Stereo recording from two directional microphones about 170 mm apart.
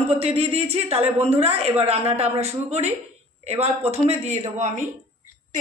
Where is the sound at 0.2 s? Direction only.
35° right (ahead or behind).